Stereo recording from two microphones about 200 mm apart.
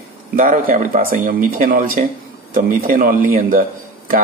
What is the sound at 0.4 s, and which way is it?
Speech, 45° right (ahead or behind).